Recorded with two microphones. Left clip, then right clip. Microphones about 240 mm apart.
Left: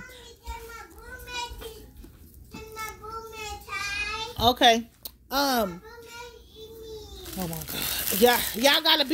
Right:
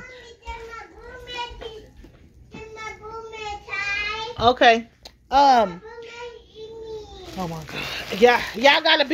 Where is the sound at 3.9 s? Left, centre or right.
Left.